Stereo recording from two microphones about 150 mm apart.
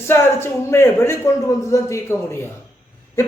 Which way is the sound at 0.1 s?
15° left (ahead or behind).